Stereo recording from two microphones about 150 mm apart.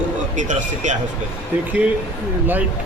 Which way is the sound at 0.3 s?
55° right (ahead or behind).